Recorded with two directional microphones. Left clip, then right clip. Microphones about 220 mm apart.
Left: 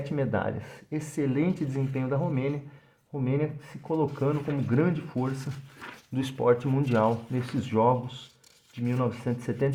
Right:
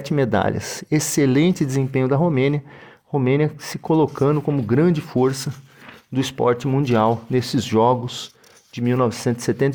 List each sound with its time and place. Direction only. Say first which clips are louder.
0.0 s speech: right 10 dB; 45° right (ahead or behind)